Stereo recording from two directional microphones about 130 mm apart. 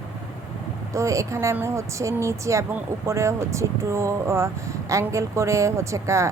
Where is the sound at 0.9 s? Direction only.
25° right (ahead or behind).